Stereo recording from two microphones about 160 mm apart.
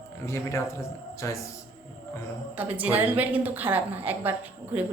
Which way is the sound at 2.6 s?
10° right (ahead or behind).